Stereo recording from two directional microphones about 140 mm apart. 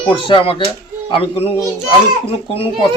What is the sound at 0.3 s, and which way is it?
Speech, 40° left (ahead or behind).